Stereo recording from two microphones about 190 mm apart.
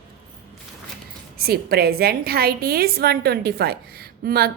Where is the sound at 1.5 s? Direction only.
55° right (ahead or behind).